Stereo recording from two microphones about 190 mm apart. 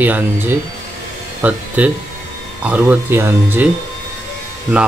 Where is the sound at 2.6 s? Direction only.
10° right (ahead or behind).